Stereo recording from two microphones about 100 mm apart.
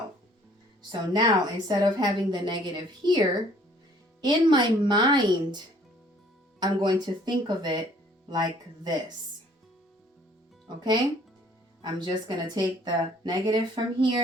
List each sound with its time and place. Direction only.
0.8 s speech: 45° right (ahead or behind)
6.6 s speech: 45° right (ahead or behind)
10.8 s speech: 45° right (ahead or behind)